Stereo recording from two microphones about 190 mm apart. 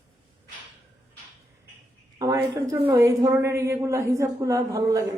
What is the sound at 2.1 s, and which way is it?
A woman's voice, 20° right (ahead or behind).